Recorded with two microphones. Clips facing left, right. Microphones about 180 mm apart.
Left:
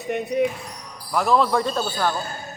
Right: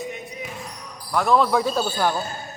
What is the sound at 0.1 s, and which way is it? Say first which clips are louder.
Speech: left 12 dB; 65° left (ahead or behind).